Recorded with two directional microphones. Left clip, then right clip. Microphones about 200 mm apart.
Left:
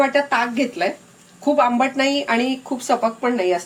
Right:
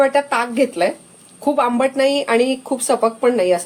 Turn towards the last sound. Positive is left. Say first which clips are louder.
# right 4 dB
turn(degrees=-55)  # may be behind; listen again after turning